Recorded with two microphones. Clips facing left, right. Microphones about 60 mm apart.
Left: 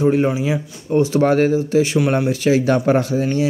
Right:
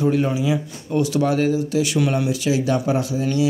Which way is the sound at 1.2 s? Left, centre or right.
Left.